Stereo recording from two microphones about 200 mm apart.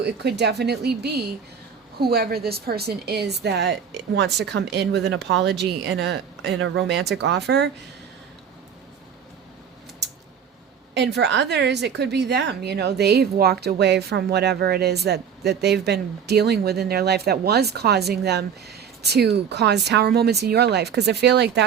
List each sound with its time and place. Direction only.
0.0 s a woman's voice: 55° right (ahead or behind)
10.0 s a sound: 60° right (ahead or behind)
10.9 s a woman's voice: 60° right (ahead or behind)